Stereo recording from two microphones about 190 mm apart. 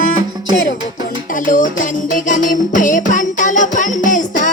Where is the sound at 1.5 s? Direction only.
45° left (ahead or behind).